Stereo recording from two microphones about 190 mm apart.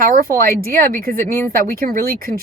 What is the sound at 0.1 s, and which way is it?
Speech, 45° right (ahead or behind).